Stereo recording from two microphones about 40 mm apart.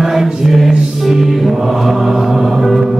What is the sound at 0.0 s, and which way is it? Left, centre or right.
Music, centre.